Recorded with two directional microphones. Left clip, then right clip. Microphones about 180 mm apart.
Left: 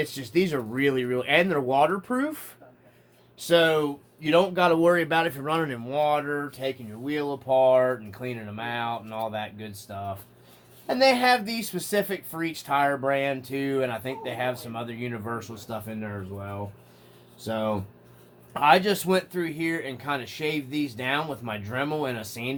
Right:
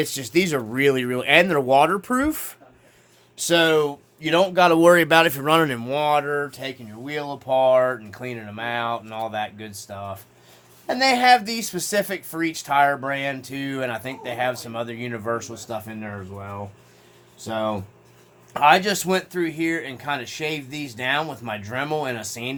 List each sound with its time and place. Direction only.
0.0 s speech: 65° right (ahead or behind); by 22.5 s 35° right (ahead or behind)